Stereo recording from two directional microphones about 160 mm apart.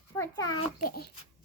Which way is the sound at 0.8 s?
60° left (ahead or behind).